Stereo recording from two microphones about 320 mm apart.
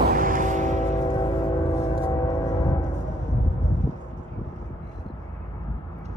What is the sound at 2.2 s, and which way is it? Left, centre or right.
Train, centre.